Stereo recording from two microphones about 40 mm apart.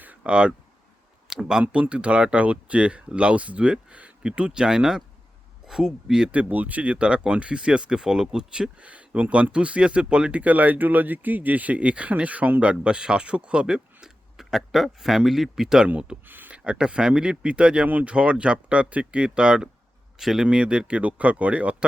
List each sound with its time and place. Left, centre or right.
0.2 s speech: right
1.4 s speech: centre
1.6 s speech: right; by 6.3 s centre
6.5 s speech: right; by 8.7 s centre
8.8 s speech: right
10.4 s speech: right; by 14.1 s centre
14.3 s speech: centre
16.2 s speech: right
16.7 s speech: right
20.1 s speech: centre
20.5 s speech: right